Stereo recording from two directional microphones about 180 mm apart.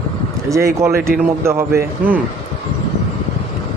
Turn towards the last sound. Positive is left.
turn(degrees=-15)  # may be behind; listen again after turning